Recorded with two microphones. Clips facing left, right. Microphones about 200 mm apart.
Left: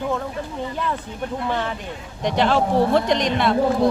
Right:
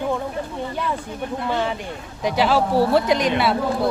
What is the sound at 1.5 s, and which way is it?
Speech, 10° right (ahead or behind).